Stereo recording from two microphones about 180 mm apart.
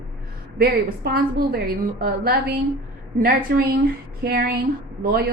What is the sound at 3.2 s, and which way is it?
A woman's voice, 55° right (ahead or behind).